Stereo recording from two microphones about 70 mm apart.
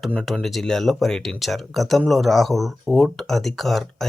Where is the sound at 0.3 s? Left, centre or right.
Centre.